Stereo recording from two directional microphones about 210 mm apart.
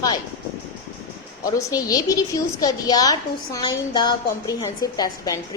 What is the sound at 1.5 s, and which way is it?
A woman's voice, 15° left (ahead or behind).